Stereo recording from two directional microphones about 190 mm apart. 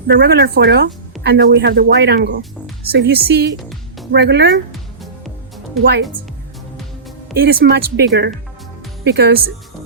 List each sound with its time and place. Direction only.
0.1 s speech: 60° right (ahead or behind)
3.6 s music: centre (ahead or behind)
4.1 s speech: 65° right (ahead or behind)
7.3 s speech: 55° right (ahead or behind)